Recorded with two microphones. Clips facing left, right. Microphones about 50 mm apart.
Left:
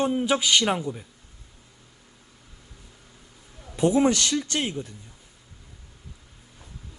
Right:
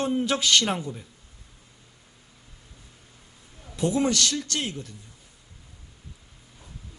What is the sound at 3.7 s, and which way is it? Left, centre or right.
A man's voice, left.